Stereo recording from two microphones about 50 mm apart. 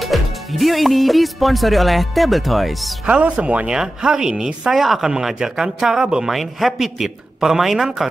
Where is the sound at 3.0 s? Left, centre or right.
Right.